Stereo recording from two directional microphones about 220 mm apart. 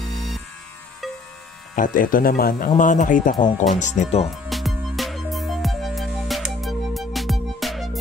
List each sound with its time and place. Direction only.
0.1 s music: centre (ahead or behind)
1.0 s a sound: centre (ahead or behind)
1.8 s speech: 40° left (ahead or behind)
4.3 s music: centre (ahead or behind)